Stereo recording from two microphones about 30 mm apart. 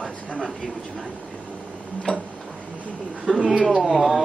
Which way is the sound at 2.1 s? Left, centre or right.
Left.